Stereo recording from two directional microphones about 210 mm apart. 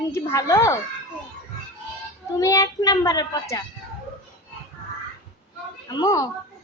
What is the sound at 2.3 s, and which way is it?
A woman's voice, 15° left (ahead or behind).